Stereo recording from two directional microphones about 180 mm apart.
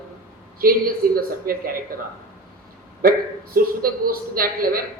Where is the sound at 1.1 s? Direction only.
55° right (ahead or behind).